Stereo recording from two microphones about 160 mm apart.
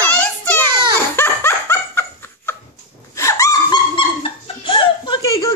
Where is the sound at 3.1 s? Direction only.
20° left (ahead or behind).